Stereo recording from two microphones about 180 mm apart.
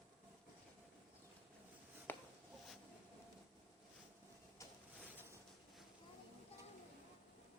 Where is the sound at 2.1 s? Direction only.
10° left (ahead or behind).